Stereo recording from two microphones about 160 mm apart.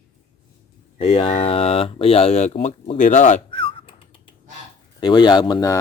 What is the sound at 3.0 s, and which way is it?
Speech, 50° left (ahead or behind).